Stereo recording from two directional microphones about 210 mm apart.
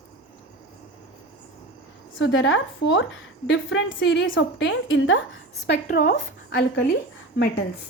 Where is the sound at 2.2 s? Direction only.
65° left (ahead or behind).